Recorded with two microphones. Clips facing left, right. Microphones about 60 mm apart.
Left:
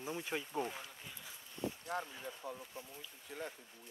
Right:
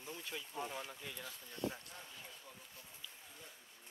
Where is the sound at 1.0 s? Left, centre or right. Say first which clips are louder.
Right 4 dB; right.